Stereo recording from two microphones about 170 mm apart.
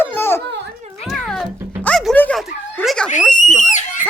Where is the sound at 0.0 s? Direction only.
15° left (ahead or behind).